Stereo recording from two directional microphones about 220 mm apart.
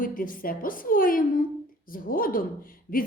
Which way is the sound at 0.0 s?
40° left (ahead or behind).